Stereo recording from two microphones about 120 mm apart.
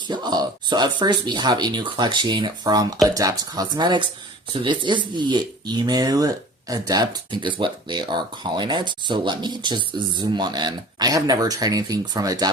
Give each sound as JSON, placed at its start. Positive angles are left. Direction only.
{"t": 0.1, "sound": "speech", "side_deg": -35}